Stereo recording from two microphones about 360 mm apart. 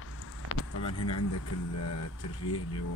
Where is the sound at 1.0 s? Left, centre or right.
Left.